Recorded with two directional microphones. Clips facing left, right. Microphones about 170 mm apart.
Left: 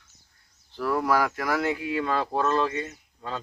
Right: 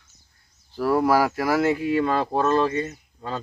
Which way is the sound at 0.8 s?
35° right (ahead or behind).